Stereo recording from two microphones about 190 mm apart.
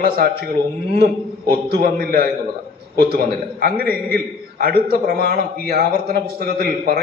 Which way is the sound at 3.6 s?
50° right (ahead or behind).